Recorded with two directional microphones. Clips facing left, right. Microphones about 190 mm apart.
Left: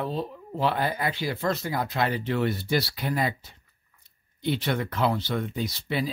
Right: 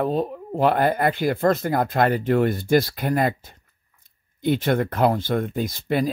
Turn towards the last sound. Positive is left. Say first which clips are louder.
# right 6 dB
turn(degrees=-50)  # may be behind; listen again after turning